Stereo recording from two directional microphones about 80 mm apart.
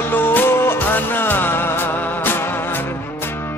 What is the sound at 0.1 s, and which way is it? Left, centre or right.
Music, left.